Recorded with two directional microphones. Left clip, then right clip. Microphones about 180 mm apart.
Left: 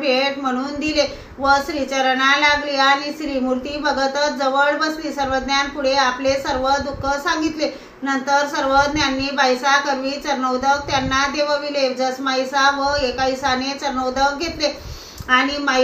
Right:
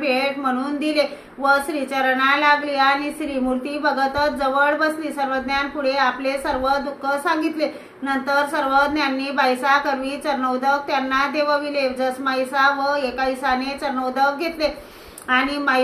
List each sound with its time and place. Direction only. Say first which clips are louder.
0.0 s a woman's voice: left 2 dB; 25° right (ahead or behind)